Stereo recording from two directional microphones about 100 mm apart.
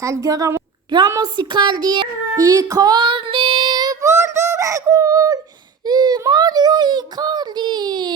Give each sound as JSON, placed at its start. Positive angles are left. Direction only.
{"t": 0.0, "sound": "a child's voice", "side_deg": -35}
{"t": 1.2, "sound": "speech", "side_deg": -50}
{"t": 4.0, "sound": "a sound", "side_deg": -30}
{"t": 5.8, "sound": "a child's voice", "side_deg": -45}